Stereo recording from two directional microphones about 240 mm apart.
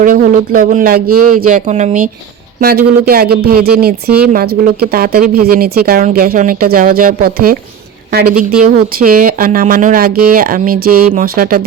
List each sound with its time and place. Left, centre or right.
0.0 s speech: right
8.6 s speech: right